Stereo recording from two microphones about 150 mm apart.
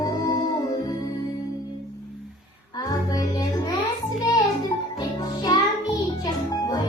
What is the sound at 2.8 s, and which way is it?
Music, 25° left (ahead or behind).